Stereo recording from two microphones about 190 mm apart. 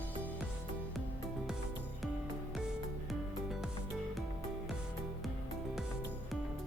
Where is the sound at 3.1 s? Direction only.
Centre (ahead or behind).